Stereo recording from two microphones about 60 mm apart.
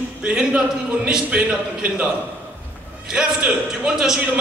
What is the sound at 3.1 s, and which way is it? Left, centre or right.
Speech, centre.